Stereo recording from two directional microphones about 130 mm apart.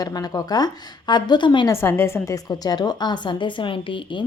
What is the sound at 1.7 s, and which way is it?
A woman's voice, 20° left (ahead or behind).